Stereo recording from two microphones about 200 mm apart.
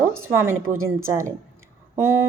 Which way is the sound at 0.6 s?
90° right.